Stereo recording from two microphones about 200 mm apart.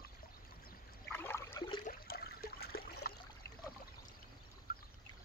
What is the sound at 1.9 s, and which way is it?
Water, 50° left (ahead or behind).